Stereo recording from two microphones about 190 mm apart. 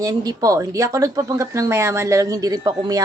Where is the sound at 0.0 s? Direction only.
20° right (ahead or behind).